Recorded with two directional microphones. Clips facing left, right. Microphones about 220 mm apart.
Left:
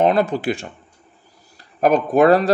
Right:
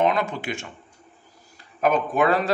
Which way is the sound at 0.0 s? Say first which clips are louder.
Left 6 dB; 35° left (ahead or behind).